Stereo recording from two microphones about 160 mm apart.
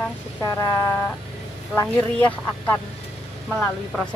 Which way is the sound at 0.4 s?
20° left (ahead or behind).